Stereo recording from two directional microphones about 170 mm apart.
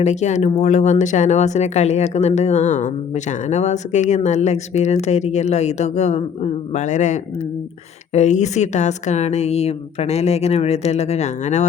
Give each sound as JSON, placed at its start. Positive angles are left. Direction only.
{"t": 0.0, "sound": "a woman's voice", "side_deg": 40}